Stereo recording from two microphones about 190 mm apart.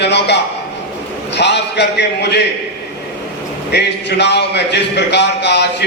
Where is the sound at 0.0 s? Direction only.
65° left (ahead or behind).